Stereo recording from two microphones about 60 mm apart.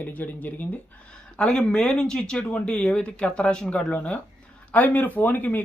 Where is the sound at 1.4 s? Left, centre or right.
Centre.